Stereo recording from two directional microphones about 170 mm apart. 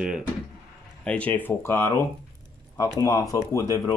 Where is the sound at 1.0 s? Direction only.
10° left (ahead or behind).